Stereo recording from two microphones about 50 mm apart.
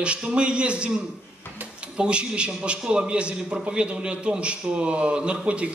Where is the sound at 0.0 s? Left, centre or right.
Right.